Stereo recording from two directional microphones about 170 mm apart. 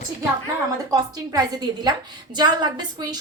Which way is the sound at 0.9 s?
20° right (ahead or behind).